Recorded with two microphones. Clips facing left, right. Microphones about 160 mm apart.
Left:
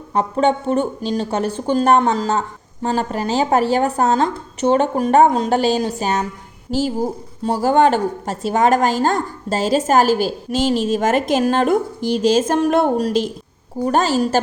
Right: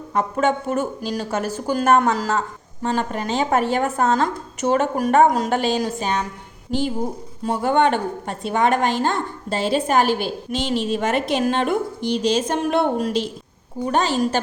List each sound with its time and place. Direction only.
0.1 s a woman's voice: 30° left (ahead or behind)